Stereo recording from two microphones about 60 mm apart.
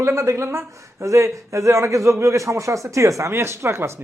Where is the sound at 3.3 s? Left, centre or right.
Right.